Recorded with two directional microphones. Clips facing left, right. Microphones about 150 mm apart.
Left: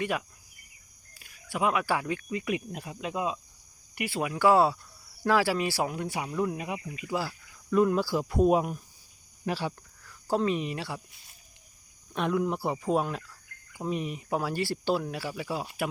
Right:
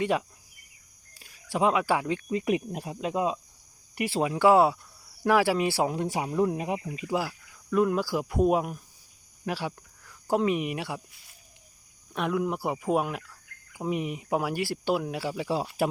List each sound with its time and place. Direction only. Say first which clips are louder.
0.0 s speech: right 4 dB; 25° right (ahead or behind)
2.3 s speech: right 7 dB; 35° right (ahead or behind)
7.7 s speech: even; centre (ahead or behind)
12.1 s speech: even; 5° right (ahead or behind); by 15.6 s 25° right (ahead or behind)